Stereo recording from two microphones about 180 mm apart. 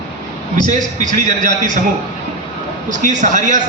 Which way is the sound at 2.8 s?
45° right (ahead or behind).